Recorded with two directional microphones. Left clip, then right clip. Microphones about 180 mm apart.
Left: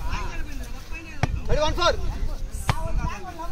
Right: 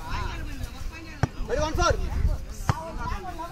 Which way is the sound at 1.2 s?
60° right (ahead or behind).